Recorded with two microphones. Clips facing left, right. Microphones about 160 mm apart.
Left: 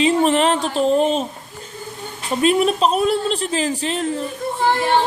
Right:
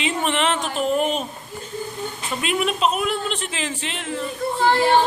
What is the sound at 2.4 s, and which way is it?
A man's voice, 35° left (ahead or behind).